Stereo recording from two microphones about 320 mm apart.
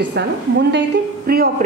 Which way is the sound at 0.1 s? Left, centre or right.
Right.